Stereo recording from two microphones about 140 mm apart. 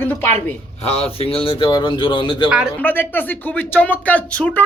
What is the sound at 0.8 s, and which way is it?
Speech, 45° left (ahead or behind).